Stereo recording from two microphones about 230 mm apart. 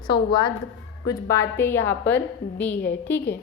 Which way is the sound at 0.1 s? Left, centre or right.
Left.